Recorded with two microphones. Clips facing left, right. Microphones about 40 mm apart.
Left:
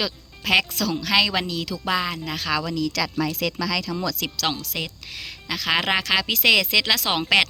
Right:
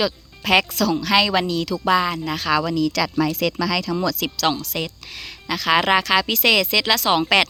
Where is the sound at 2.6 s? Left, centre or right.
Right.